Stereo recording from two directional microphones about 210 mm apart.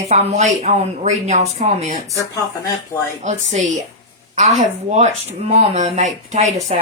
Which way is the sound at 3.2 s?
35° right (ahead or behind).